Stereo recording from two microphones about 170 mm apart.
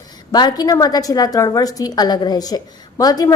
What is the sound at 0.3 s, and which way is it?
A woman's voice, 25° left (ahead or behind).